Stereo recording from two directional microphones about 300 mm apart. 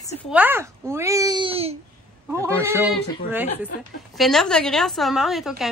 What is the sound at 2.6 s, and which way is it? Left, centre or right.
A woman's voice, centre.